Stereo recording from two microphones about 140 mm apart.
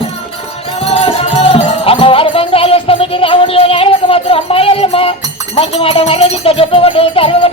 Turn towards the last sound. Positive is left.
turn(degrees=40)  # may be behind; listen again after turning